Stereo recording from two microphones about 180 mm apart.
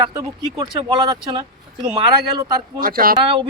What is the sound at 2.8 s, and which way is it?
Speech, 55° right (ahead or behind).